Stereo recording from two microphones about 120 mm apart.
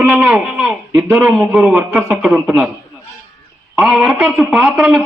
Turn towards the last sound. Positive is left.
turn(degrees=0)  # may be behind; listen again after turning